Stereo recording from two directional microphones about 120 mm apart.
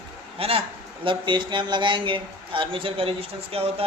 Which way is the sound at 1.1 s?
40° right (ahead or behind).